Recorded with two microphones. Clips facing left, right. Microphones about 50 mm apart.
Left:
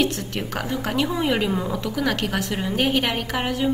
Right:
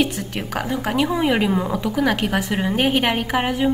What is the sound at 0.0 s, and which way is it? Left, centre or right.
A woman's voice, centre.